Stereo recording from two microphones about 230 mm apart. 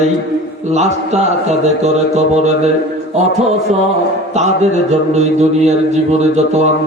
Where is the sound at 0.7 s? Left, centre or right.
Right.